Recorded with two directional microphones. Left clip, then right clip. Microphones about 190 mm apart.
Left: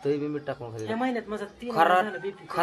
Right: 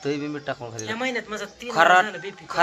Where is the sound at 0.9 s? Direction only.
25° left (ahead or behind).